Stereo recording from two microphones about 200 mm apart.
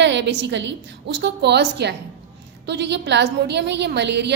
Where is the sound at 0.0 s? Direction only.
60° right (ahead or behind).